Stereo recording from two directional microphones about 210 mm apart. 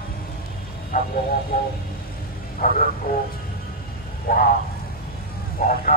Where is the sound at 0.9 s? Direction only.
45° left (ahead or behind).